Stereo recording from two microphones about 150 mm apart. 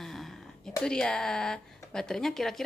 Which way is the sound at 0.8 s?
5° left (ahead or behind).